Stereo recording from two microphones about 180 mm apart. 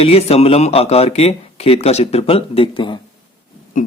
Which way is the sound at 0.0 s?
35° left (ahead or behind).